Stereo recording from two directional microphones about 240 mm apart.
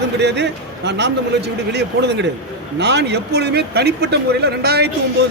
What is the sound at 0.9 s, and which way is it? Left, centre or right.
A man's voice, right.